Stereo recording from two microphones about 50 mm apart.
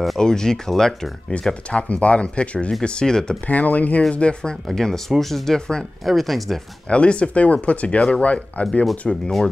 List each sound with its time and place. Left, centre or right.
0.2 s speech: centre
1.5 s speech: left
3.4 s speech: left; by 6.6 s centre
6.9 s speech: left
9.0 s speech: centre